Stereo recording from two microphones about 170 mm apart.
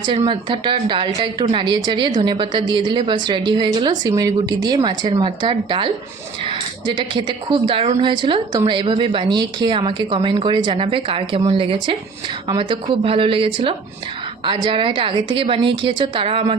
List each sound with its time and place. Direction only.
0.2 s a woman's voice: 30° right (ahead or behind)